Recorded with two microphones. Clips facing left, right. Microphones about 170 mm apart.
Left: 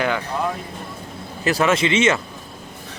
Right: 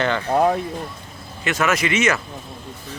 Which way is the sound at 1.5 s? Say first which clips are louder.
Left 3 dB; 30° left (ahead or behind).